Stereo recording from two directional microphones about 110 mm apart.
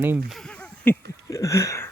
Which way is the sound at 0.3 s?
5° left (ahead or behind).